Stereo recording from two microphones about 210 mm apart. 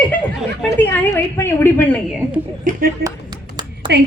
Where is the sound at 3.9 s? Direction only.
55° right (ahead or behind).